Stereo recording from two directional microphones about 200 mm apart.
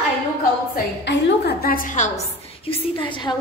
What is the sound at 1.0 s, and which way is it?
A woman's voice, 50° left (ahead or behind).